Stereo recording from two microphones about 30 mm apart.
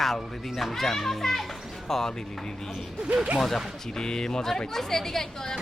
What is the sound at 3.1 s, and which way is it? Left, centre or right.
Speech, right.